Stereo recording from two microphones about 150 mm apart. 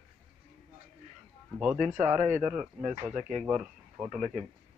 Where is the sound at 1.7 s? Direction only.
50° right (ahead or behind).